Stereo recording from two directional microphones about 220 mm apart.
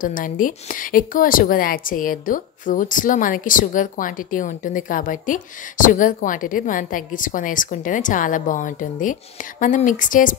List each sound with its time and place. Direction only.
0.0 s a woman's voice: 40° left (ahead or behind)